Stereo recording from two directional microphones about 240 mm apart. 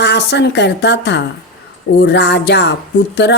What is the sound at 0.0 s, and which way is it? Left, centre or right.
A woman's voice, left.